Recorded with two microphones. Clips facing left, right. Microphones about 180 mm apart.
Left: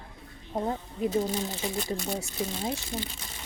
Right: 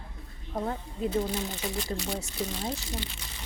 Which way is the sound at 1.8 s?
50° left (ahead or behind).